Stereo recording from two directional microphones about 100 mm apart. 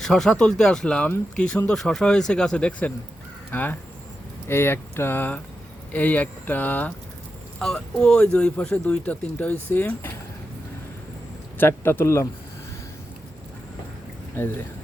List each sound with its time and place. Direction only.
0.0 s speech: 5° left (ahead or behind)
7.6 s speech: 5° left (ahead or behind)
11.5 s speech: 20° left (ahead or behind)
14.3 s speech: 25° left (ahead or behind)